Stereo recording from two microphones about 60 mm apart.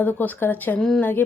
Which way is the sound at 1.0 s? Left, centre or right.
Left.